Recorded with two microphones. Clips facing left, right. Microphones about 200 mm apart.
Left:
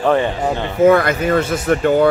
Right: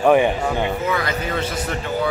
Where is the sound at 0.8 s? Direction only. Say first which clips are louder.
Left 11 dB; 50° left (ahead or behind).